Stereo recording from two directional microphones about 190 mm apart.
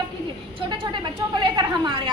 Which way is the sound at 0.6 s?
25° right (ahead or behind).